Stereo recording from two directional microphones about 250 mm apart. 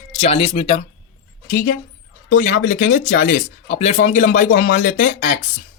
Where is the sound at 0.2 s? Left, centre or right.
Left.